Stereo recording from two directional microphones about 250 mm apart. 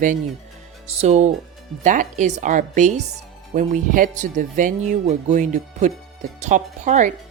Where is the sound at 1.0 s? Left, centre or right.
Right.